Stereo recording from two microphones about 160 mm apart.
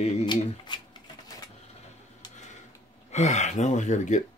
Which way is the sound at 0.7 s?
30° left (ahead or behind).